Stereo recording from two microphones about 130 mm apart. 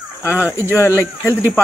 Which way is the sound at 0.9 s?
15° right (ahead or behind).